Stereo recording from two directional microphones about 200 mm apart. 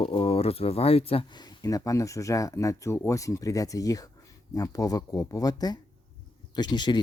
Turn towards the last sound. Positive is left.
turn(degrees=20)  # may be behind; listen again after turning